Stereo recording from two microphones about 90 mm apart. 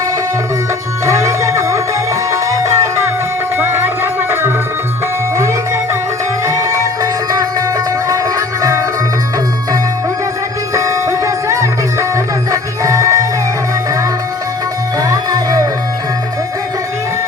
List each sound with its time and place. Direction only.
1.0 s music: 35° right (ahead or behind)
3.6 s music: 25° right (ahead or behind)
6.4 s music: 35° right (ahead or behind)
10.8 s music: 35° right (ahead or behind)
14.9 s music: 45° right (ahead or behind)